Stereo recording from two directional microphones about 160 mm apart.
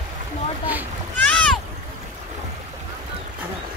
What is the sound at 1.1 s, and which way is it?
Rowboat, 5° left (ahead or behind).